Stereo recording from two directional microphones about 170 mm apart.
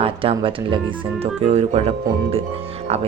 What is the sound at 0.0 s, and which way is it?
Speech, 30° right (ahead or behind).